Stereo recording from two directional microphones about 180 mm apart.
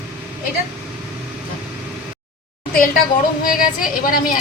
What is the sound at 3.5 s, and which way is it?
Speech, 50° left (ahead or behind).